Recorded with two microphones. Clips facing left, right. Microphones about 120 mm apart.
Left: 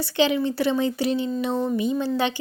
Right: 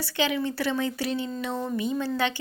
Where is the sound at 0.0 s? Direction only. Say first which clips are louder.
Left 5 dB; 25° left (ahead or behind).